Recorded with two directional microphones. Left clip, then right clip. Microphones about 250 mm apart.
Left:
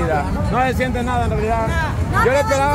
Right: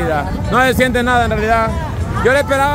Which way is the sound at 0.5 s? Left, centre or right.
Right.